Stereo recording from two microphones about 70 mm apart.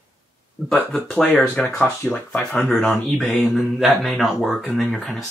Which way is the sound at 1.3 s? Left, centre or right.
Left.